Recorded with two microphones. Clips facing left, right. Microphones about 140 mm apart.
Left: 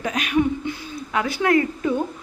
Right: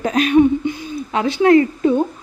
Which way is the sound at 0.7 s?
20° right (ahead or behind).